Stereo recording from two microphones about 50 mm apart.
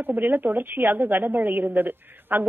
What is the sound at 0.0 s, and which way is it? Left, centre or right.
A woman's voice, right.